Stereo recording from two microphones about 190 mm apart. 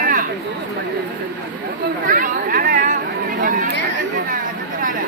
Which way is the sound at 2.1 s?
45° right (ahead or behind).